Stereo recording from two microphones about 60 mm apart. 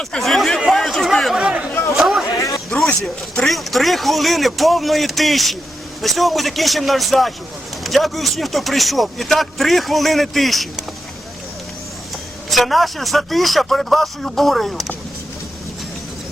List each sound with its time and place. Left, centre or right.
0.0 s speech: centre
0.7 s a sound: centre
1.4 s chatter: centre
2.0 s a sound: centre
3.3 s speech: centre
12.5 s speech: centre